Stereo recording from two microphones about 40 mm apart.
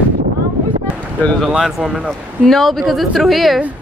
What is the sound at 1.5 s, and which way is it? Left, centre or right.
Speech, centre.